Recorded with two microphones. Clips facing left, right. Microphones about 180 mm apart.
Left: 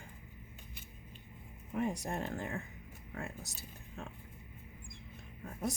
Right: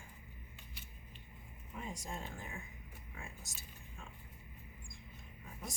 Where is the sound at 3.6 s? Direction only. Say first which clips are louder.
Left 7 dB; 65° left (ahead or behind).